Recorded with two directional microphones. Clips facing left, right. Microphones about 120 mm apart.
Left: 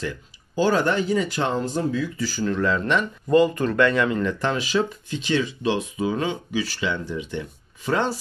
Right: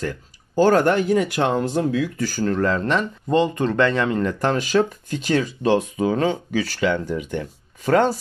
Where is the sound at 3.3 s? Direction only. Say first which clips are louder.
Left 1 dB; 25° right (ahead or behind).